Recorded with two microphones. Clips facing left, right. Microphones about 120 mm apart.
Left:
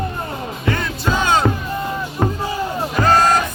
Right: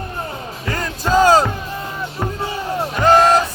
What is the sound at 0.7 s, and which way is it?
Music, 40° right (ahead or behind).